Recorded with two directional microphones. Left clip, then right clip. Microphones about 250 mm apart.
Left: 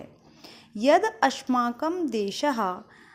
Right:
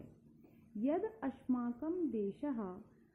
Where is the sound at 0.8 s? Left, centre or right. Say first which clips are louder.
Left 18 dB; centre.